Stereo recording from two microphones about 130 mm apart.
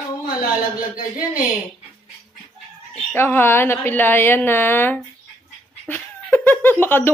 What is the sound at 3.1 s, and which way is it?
A woman's voice, 15° left (ahead or behind).